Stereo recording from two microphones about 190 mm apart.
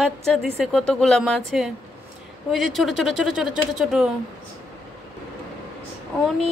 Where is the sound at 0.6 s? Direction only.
Centre (ahead or behind).